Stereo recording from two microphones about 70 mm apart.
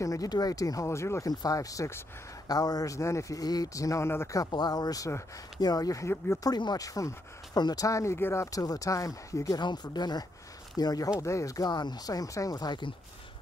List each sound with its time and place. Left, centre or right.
0.0 s speech: left
0.3 s speech: left
1.4 s speech: left
2.4 s speech: left
4.5 s speech: left
6.0 s speech: left
6.4 s speech: left
7.5 s speech: left
8.5 s speech: left
9.6 s speech: left
10.8 s speech: left
11.1 s speech: left